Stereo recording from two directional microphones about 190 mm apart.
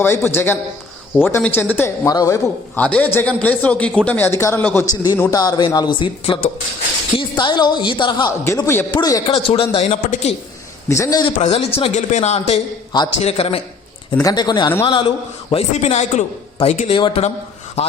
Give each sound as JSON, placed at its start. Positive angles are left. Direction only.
{"t": 0.0, "sound": "a man's voice", "side_deg": 10}
{"t": 8.4, "sound": "a man's voice", "side_deg": 15}
{"t": 9.3, "sound": "a man's voice", "side_deg": 30}
{"t": 10.8, "sound": "a man's voice", "side_deg": 15}
{"t": 11.3, "sound": "a man's voice", "side_deg": 35}
{"t": 14.2, "sound": "a woman's voice", "side_deg": 20}